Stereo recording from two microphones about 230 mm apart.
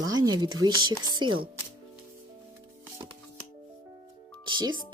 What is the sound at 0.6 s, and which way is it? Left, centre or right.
Speech, centre.